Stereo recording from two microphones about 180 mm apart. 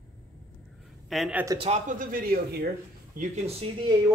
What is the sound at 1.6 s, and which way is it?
Speech, 40° right (ahead or behind).